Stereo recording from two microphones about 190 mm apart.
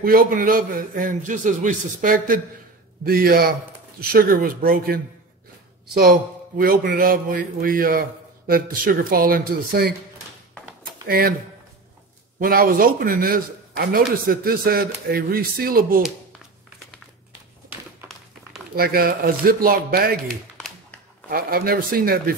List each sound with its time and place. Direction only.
0.0 s a man's voice: 50° right (ahead or behind)
11.1 s a man's voice: 50° right (ahead or behind)
12.4 s a man's voice: 50° right (ahead or behind)
18.8 s a man's voice: 50° right (ahead or behind)
21.3 s a man's voice: 50° right (ahead or behind)